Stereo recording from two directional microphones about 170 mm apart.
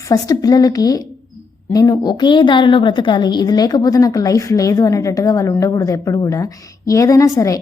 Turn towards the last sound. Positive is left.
turn(degrees=20)  # may be behind; listen again after turning